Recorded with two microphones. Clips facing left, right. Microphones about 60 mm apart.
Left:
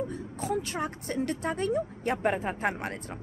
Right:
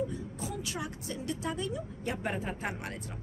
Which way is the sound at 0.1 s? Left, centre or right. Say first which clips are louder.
Left 7 dB; left.